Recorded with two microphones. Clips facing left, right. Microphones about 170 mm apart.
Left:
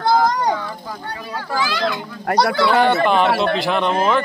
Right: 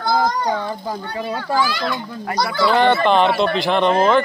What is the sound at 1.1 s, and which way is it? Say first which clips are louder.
Speech: right 5 dB; 30° right (ahead or behind).